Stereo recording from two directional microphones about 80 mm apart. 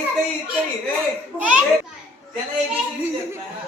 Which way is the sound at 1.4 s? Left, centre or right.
Centre.